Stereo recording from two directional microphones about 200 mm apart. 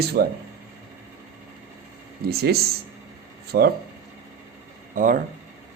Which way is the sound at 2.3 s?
50° right (ahead or behind).